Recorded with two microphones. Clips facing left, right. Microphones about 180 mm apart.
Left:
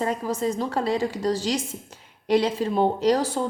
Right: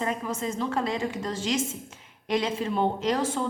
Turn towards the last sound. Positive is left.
turn(degrees=35)  # may be behind; listen again after turning